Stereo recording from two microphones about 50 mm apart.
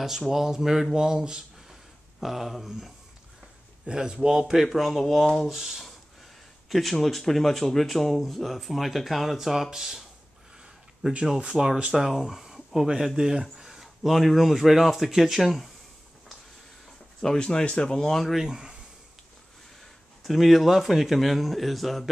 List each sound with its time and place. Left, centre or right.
0.3 s speech: centre
2.1 s speech: centre
5.5 s speech: centre
17.2 s speech: centre
18.3 s speech: centre
20.2 s speech: centre